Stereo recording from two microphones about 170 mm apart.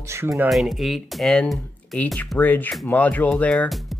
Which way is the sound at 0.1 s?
15° right (ahead or behind).